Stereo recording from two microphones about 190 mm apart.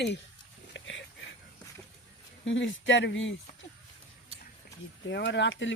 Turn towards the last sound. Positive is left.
turn(degrees=75)  # may be behind; listen again after turning